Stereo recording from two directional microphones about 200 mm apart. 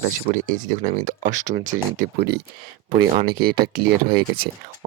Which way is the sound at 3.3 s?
50° right (ahead or behind).